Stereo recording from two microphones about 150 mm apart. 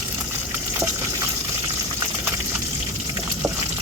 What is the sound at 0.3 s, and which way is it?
Water, 20° right (ahead or behind).